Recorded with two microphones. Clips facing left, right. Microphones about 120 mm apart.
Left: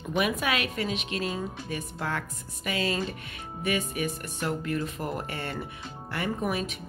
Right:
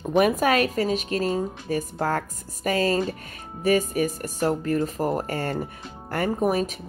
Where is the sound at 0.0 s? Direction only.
40° right (ahead or behind).